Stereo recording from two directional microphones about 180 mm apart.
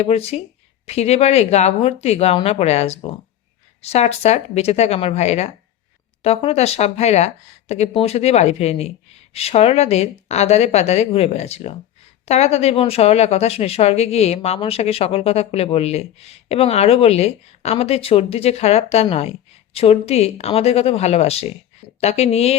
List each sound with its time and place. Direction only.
0.0 s speech: 35° left (ahead or behind)